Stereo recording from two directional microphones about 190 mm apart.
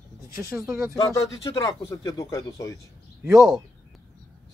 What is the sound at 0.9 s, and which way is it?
Speech, 20° left (ahead or behind).